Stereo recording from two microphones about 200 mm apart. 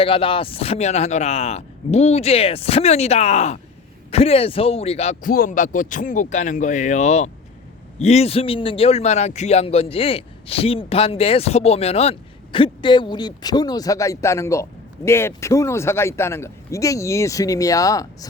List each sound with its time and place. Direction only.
0.0 s speech: 25° left (ahead or behind)
5.3 s a man's voice: 45° left (ahead or behind); by 18.3 s 15° left (ahead or behind)